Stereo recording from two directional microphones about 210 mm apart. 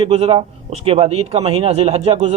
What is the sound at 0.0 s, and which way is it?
A man's voice, 30° right (ahead or behind).